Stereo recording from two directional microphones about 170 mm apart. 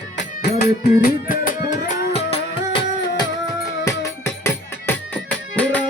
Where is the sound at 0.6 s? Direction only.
60° left (ahead or behind); by 2.8 s 35° left (ahead or behind).